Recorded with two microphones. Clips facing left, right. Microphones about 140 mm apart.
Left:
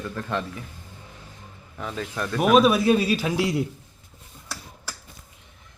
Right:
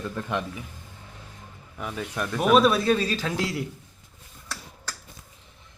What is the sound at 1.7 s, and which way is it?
Speech, 10° right (ahead or behind).